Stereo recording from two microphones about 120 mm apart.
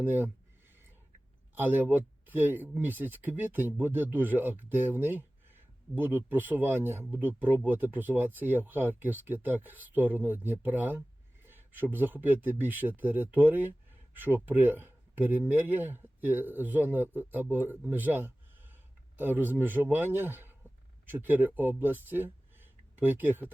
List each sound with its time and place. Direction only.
0.0 s speech: 15° right (ahead or behind)
1.5 s speech: 15° right (ahead or behind)